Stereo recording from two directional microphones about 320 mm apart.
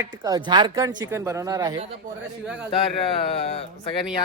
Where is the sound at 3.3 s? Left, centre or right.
Centre.